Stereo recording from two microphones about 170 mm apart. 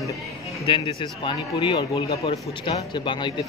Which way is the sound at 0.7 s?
30° left (ahead or behind).